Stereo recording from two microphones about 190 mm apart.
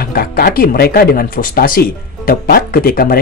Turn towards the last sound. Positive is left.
turn(degrees=50)  # may be behind; listen again after turning